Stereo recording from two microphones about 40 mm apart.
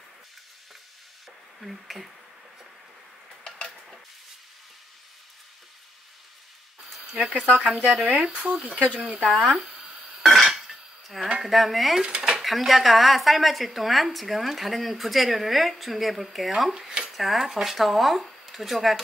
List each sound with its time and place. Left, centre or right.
1.6 s speech: centre
3.4 s mechanisms: centre
7.2 s speech: right
7.5 s speech: centre
8.2 s speech: right
9.0 s speech: centre
9.6 s a sound: centre
10.5 s dishes: centre
11.4 s speech: centre
12.0 s dishes: centre
12.4 s speech: centre